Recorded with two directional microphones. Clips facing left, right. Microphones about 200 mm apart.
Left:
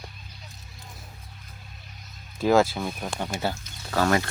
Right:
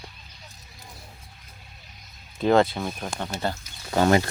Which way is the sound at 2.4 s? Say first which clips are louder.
Right 1 dB; 5° left (ahead or behind).